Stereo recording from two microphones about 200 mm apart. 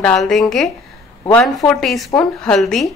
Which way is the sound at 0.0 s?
5° left (ahead or behind).